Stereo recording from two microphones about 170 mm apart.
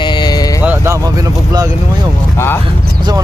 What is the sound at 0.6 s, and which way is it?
Speech, 10° right (ahead or behind).